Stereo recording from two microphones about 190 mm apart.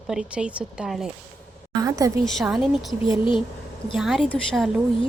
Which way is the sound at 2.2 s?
Centre (ahead or behind).